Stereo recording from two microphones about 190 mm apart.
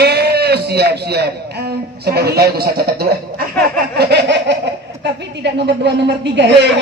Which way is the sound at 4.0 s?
65° right (ahead or behind).